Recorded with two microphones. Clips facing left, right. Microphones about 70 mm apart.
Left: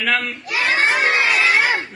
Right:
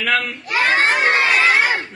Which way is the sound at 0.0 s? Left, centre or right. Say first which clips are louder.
Right 1 dB; centre.